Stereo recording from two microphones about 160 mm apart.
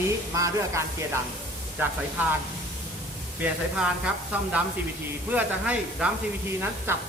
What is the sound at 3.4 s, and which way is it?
Speech, 5° right (ahead or behind).